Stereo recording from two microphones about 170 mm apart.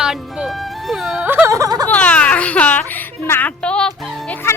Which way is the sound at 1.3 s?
15° right (ahead or behind).